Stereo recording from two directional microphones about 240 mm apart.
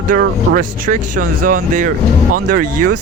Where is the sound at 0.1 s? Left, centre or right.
Right.